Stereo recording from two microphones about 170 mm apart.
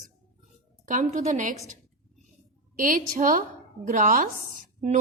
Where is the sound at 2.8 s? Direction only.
50° right (ahead or behind).